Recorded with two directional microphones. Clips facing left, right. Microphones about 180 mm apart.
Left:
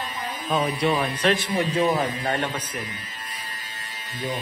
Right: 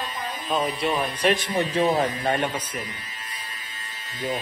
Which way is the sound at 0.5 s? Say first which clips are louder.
Left 2 dB; 5° right (ahead or behind).